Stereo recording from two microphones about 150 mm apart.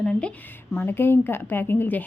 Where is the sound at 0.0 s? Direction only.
5° left (ahead or behind).